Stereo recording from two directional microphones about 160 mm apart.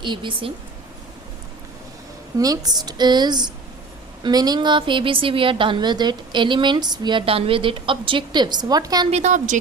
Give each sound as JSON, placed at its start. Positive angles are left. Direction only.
{"t": 0.0, "sound": "a woman's voice", "side_deg": -30}
{"t": 2.4, "sound": "a woman's voice", "side_deg": -20}
{"t": 9.0, "sound": "a woman's voice", "side_deg": -45}